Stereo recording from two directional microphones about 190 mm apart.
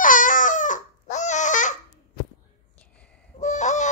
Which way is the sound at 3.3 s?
40° left (ahead or behind).